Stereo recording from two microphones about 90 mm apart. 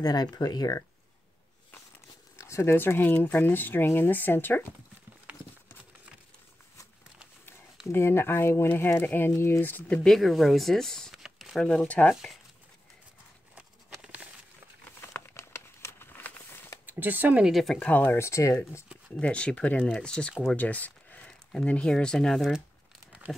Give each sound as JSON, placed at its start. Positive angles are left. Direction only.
{"t": 0.0, "sound": "speech", "side_deg": 50}
{"t": 2.3, "sound": "speech", "side_deg": 35}
{"t": 7.8, "sound": "speech", "side_deg": 30}
{"t": 10.0, "sound": "speech", "side_deg": 5}
{"t": 11.2, "sound": "a sound", "side_deg": 0}
{"t": 12.1, "sound": "speech", "side_deg": 0}
{"t": 14.0, "sound": "a sound", "side_deg": -15}
{"t": 14.9, "sound": "a sound", "side_deg": 25}
{"t": 16.2, "sound": "a sound", "side_deg": 20}
{"t": 16.8, "sound": "speech", "side_deg": -20}
{"t": 17.5, "sound": "speech", "side_deg": 0}
{"t": 17.8, "sound": "speech", "side_deg": 20}
{"t": 18.1, "sound": "speech", "side_deg": 35}
{"t": 19.1, "sound": "speech", "side_deg": 10}